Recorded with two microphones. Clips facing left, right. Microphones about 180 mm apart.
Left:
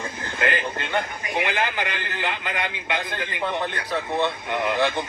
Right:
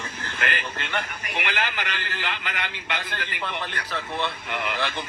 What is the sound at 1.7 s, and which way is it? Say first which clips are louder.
Speech: left 4 dB; 20° left (ahead or behind).